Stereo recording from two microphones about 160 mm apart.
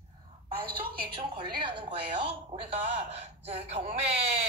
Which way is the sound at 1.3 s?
30° right (ahead or behind).